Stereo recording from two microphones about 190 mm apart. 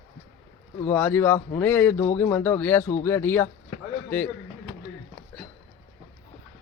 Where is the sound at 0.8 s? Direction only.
10° left (ahead or behind).